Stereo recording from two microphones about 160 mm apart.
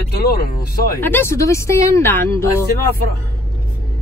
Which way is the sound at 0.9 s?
15° left (ahead or behind).